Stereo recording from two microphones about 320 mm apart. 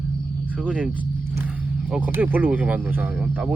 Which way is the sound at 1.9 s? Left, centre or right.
Centre.